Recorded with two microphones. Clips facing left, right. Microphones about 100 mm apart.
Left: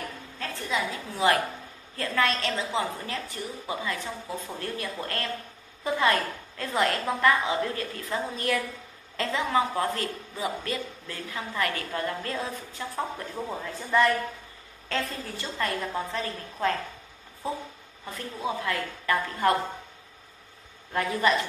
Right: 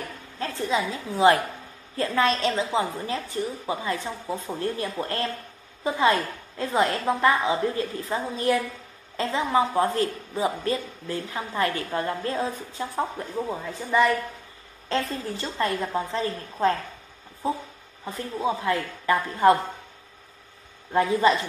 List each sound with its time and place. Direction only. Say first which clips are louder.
0.4 s a woman's voice: right 4 dB; 25° right (ahead or behind)
13.5 s speech: left 1 dB; 5° right (ahead or behind)
14.9 s speech: right 4 dB; 25° right (ahead or behind)
18.0 s speech: right 5 dB; 25° right (ahead or behind)
20.9 s speech: right 5 dB; 25° right (ahead or behind)